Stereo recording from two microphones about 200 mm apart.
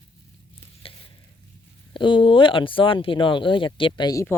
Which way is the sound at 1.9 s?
25° left (ahead or behind).